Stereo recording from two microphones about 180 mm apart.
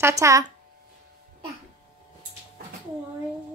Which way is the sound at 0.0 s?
15° right (ahead or behind).